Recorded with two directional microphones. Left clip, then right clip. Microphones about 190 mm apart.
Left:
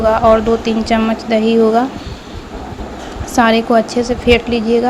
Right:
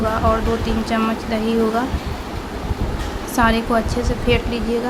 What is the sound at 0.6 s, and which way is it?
Speech, 25° left (ahead or behind).